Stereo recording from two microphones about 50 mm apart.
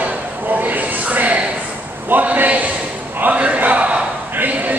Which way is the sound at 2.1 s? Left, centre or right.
Right.